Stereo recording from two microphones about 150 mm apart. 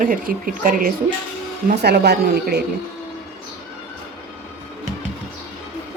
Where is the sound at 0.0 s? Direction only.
70° right (ahead or behind).